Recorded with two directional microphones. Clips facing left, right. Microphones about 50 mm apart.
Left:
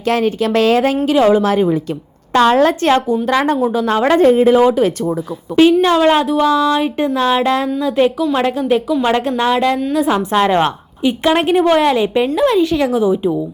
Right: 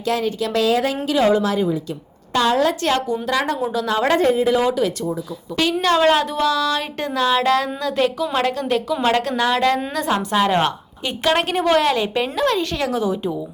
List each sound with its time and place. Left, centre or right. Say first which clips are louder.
0.1 s speech: left 6 dB; left
1.0 s speech: left 4 dB; left
1.5 s speech: left 6 dB; left
4.2 s speech: left 7 dB; left
5.8 s a woman's voice: left 4 dB; centre
6.4 s a woman's voice: left 6 dB; left